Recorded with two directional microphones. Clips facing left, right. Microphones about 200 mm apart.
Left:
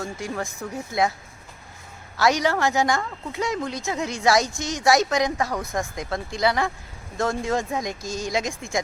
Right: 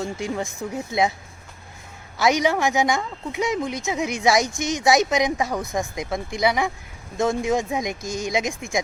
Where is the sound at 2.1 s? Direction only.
20° right (ahead or behind).